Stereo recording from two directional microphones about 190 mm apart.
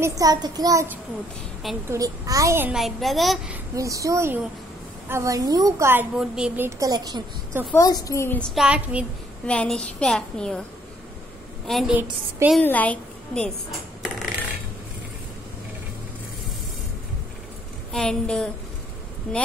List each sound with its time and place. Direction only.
0.0 s a woman's voice: 20° right (ahead or behind); by 3.5 s centre (ahead or behind)
3.7 s a woman's voice: 15° right (ahead or behind)
7.7 s a child's voice: 20° left (ahead or behind); by 9.0 s 5° right (ahead or behind)
9.5 s a child's voice: 5° left (ahead or behind)
11.6 s a woman's voice: centre (ahead or behind)
12.0 s a woman's voice: 10° right (ahead or behind)
12.6 s a child's voice: 10° left (ahead or behind)
17.9 s a child's voice: 5° left (ahead or behind)